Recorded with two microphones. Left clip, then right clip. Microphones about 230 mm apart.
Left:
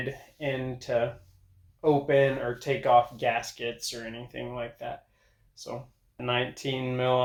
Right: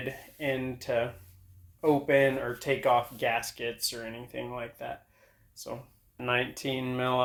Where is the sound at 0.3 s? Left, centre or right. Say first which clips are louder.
Even; right.